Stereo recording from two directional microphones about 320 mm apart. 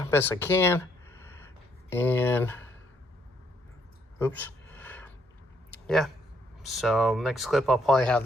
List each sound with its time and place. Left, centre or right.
0.0 s speech: centre
4.2 s a sound: centre
6.6 s speech: centre